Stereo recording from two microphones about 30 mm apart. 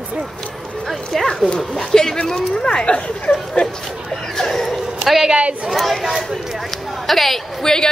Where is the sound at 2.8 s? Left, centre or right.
Left.